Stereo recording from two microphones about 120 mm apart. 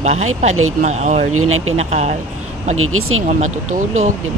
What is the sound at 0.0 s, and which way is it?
Speech, 70° right (ahead or behind).